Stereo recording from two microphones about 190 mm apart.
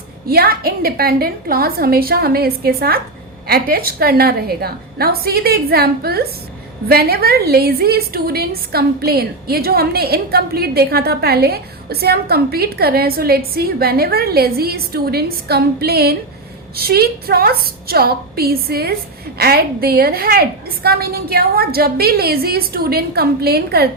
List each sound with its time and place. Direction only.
0.3 s a woman's voice: 55° right (ahead or behind)